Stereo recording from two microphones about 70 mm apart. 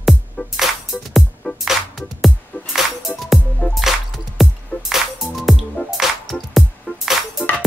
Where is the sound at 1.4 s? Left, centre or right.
Left.